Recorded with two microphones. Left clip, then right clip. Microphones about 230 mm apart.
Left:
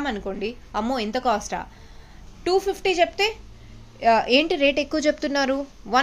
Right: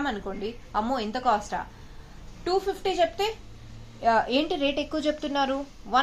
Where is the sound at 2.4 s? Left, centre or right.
Left.